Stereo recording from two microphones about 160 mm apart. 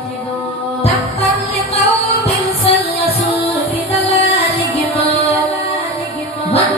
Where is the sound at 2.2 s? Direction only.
40° left (ahead or behind).